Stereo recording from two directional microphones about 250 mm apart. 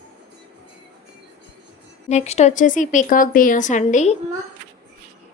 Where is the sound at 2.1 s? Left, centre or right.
Left.